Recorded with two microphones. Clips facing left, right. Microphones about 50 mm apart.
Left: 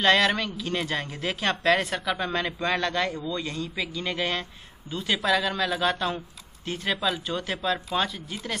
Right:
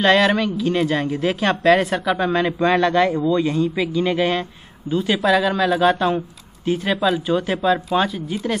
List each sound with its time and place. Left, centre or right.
0.0 s a woman's voice: centre